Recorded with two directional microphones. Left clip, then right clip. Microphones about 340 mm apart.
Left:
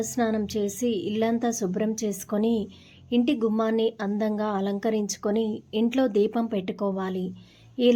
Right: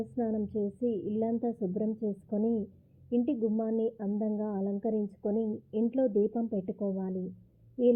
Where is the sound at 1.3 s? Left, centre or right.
Left.